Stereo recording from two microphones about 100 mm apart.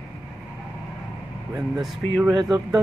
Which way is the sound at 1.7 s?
Centre (ahead or behind).